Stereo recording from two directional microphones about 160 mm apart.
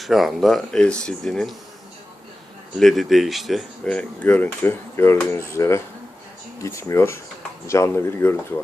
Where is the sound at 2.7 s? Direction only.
Centre (ahead or behind).